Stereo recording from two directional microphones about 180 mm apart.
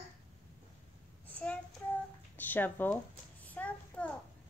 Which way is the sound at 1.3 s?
10° left (ahead or behind).